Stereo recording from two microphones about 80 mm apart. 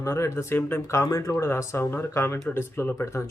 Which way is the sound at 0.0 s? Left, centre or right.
Left.